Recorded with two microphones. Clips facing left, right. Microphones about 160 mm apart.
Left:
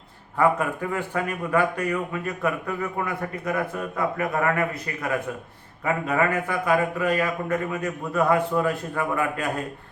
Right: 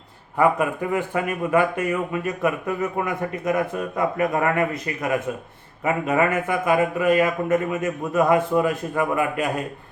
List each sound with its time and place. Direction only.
0.3 s speech: 15° right (ahead or behind)
5.8 s a man's voice: 20° right (ahead or behind)